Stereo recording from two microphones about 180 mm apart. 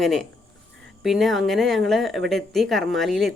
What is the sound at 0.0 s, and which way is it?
Speech, centre (ahead or behind).